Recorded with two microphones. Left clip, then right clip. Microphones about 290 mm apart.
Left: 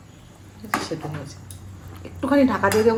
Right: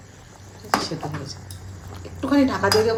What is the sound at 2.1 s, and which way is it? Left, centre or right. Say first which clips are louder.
Speech: left 1 dB; centre.